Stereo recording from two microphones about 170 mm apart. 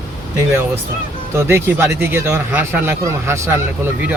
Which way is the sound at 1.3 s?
15° right (ahead or behind).